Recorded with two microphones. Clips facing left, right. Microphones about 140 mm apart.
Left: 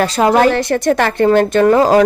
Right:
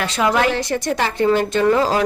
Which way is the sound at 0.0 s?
40° left (ahead or behind).